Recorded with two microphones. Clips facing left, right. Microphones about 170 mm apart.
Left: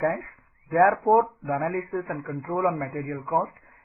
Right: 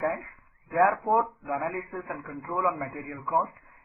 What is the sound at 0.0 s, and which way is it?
Speech, 55° left (ahead or behind).